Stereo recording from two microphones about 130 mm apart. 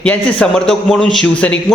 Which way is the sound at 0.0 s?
10° left (ahead or behind).